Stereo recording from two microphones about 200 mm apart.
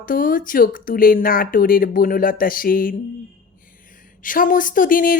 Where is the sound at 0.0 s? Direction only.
45° left (ahead or behind).